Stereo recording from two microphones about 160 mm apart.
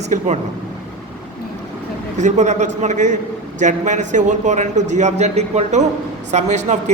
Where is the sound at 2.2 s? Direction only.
50° right (ahead or behind).